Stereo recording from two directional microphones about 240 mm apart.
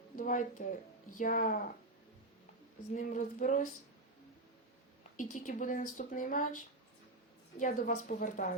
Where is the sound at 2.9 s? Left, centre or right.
Left.